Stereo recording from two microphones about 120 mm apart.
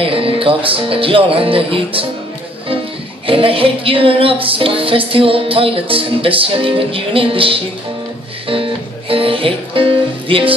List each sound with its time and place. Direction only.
0.0 s music: 50° right (ahead or behind)
3.3 s music: 50° right (ahead or behind)
8.5 s speech: 50° right (ahead or behind)